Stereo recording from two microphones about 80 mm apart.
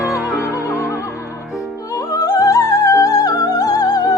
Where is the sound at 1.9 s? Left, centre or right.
Left.